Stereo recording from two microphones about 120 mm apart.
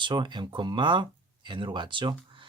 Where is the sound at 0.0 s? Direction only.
40° right (ahead or behind).